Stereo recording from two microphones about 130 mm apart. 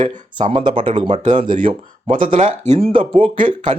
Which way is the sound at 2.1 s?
90° right.